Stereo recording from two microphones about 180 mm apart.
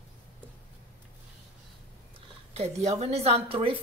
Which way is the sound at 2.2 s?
35° right (ahead or behind).